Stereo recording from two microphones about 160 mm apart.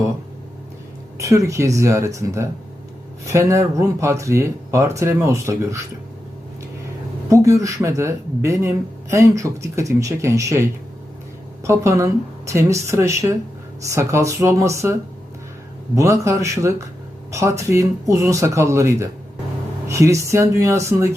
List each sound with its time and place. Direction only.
1.2 s speech: 20° right (ahead or behind)
7.3 s speech: 20° right (ahead or behind)
16.0 s speech: 20° right (ahead or behind)